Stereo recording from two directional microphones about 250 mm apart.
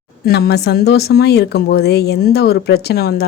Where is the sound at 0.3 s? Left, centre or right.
Left.